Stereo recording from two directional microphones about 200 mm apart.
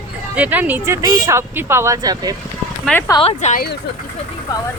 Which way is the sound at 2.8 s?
10° left (ahead or behind).